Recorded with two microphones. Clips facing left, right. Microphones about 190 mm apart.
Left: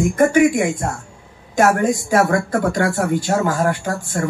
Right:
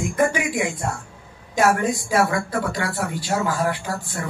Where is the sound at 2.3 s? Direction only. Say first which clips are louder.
Left 6 dB; 45° left (ahead or behind).